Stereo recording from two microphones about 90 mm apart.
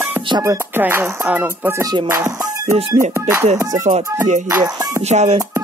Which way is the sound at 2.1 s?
35° right (ahead or behind).